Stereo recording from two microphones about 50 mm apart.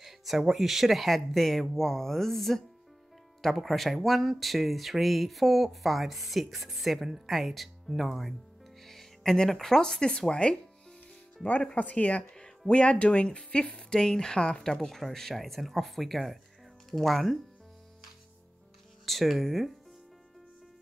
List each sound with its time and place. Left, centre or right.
0.0 s speech: centre
11.7 s speech: left
12.2 s speech: centre
19.0 s speech: centre